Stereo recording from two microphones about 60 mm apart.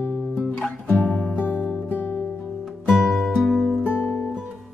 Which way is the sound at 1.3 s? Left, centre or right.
Left.